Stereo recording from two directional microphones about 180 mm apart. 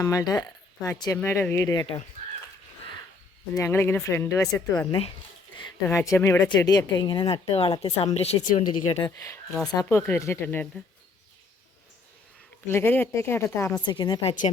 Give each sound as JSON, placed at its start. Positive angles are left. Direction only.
{"t": 0.0, "sound": "speech", "side_deg": 20}
{"t": 3.5, "sound": "speech", "side_deg": 15}
{"t": 9.0, "sound": "speech", "side_deg": 15}
{"t": 12.6, "sound": "speech", "side_deg": 15}
{"t": 13.8, "sound": "speech", "side_deg": 25}